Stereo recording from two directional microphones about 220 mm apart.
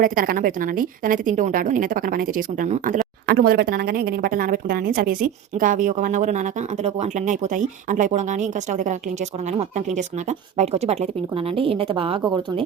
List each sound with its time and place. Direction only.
0.0 s a woman's voice: 40° right (ahead or behind); by 12.6 s 20° right (ahead or behind)